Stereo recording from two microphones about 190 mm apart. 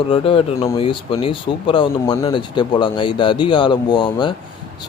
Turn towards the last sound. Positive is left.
turn(degrees=25)  # may be behind; listen again after turning